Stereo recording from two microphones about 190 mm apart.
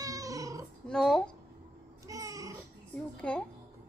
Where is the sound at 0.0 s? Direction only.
20° right (ahead or behind).